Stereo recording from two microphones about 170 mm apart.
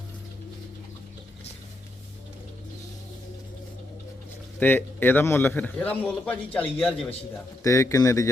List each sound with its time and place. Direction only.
4.6 s a man's voice: 10° left (ahead or behind)
7.6 s a man's voice: 20° left (ahead or behind)